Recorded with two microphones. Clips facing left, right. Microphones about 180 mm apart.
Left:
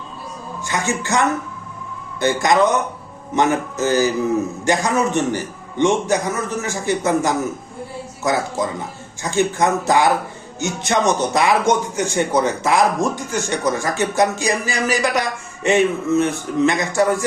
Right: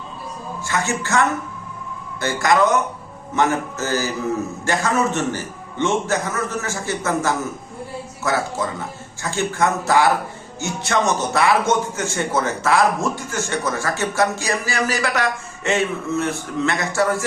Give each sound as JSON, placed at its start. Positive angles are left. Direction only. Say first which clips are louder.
{"t": 0.6, "sound": "a man's voice", "louder": "left 1 dB", "side_deg": 15}